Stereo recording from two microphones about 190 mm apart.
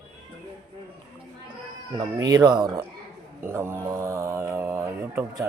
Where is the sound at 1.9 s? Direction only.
20° right (ahead or behind).